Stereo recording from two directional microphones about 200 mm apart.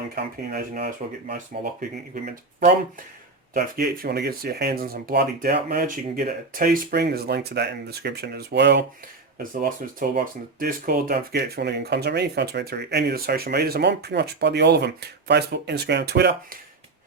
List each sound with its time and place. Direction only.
0.2 s speech: 50° right (ahead or behind)
9.4 s speech: 45° right (ahead or behind)